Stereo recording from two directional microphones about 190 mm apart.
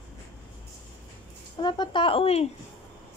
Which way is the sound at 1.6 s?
25° left (ahead or behind).